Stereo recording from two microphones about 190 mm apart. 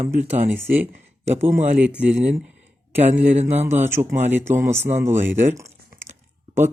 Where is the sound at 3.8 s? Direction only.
10° right (ahead or behind).